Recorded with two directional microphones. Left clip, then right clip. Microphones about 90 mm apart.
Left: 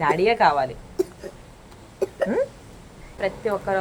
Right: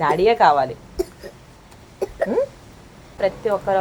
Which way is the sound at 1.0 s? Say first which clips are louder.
Left 1 dB; 10° left (ahead or behind).